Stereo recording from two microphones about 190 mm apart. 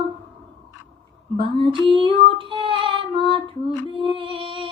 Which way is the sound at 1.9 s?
25° right (ahead or behind).